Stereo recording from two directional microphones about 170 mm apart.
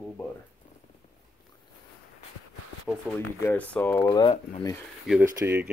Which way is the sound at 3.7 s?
10° left (ahead or behind).